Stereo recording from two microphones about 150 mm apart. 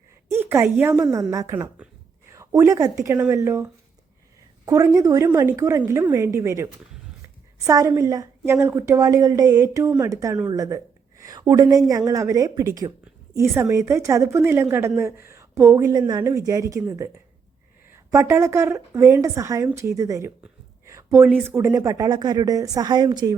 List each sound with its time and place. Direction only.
0.3 s a woman's voice: 15° right (ahead or behind)
18.1 s a woman's voice: 20° right (ahead or behind)
20.8 s a sound: 20° right (ahead or behind)
21.4 s a woman's voice: 15° right (ahead or behind)